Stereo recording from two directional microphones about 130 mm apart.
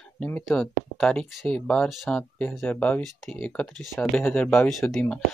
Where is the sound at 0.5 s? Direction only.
Centre (ahead or behind).